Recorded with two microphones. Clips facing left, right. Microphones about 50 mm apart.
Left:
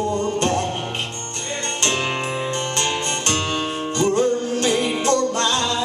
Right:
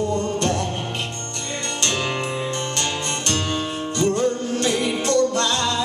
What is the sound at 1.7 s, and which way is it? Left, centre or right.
Music, left.